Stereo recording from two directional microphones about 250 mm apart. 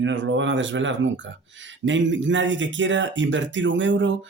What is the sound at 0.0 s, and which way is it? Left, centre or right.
Mantra, right.